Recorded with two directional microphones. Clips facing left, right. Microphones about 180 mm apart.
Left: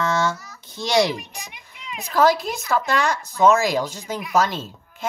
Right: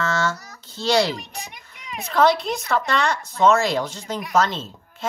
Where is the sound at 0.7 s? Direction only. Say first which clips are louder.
Even; 15° left (ahead or behind).